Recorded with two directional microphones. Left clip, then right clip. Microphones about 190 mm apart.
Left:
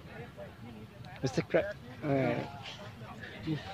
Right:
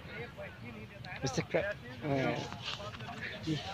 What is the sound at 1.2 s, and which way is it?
Speech, 55° left (ahead or behind).